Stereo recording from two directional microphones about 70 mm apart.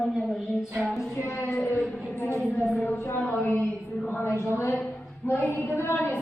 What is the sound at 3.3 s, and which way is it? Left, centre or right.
Speech, left.